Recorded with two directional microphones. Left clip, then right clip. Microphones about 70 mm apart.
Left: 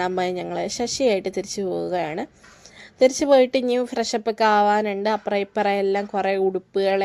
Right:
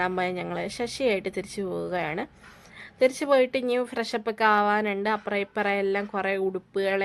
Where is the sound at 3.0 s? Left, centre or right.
Left.